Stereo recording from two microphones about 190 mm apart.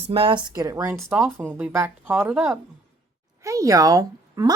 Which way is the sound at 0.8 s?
5° right (ahead or behind).